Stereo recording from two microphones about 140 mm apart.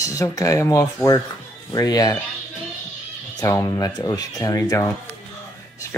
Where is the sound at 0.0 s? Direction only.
25° left (ahead or behind).